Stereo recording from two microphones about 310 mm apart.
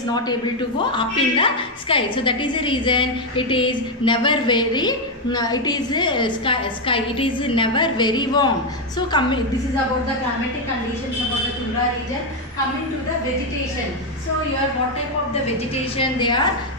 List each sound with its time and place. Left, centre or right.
0.9 s a woman's voice: centre
16.0 s a woman's voice: centre